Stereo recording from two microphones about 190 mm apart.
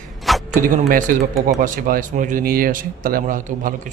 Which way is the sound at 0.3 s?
Centre (ahead or behind).